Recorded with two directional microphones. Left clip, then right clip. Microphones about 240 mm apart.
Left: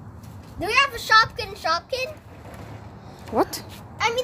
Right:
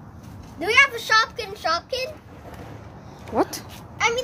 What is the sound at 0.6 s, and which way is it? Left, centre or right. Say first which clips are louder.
A child's voice: right 3 dB; centre.